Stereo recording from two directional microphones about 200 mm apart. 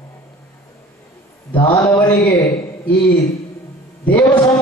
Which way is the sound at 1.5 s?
20° left (ahead or behind).